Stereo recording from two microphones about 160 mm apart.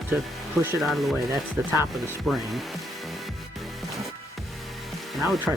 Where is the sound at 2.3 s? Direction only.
Centre (ahead or behind).